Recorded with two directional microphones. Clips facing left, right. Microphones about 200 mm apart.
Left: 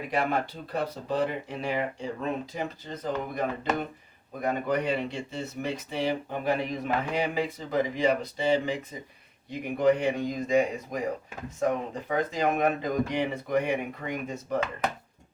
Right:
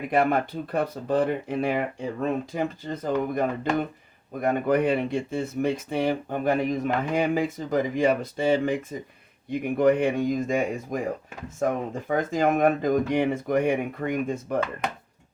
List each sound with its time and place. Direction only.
0.1 s speech: 55° right (ahead or behind)